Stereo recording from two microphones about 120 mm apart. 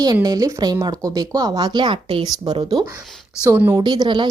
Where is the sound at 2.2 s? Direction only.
35° right (ahead or behind).